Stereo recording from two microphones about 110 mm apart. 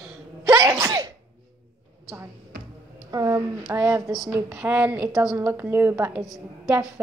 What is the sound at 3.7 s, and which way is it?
A woman's voice, 25° right (ahead or behind).